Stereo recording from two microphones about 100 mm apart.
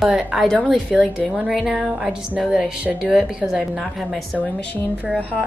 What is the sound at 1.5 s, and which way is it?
A woman's voice, centre (ahead or behind).